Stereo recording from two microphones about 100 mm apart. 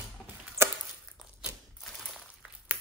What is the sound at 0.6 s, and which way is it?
Chopping, 25° right (ahead or behind).